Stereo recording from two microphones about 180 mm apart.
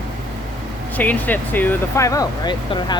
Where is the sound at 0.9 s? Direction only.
10° left (ahead or behind).